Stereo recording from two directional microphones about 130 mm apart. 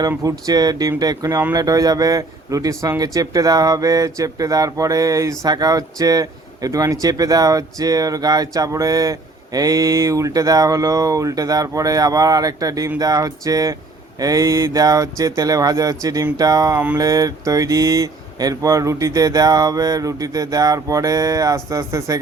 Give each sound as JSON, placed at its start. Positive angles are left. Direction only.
{"t": 0.2, "sound": "a man's voice", "side_deg": -25}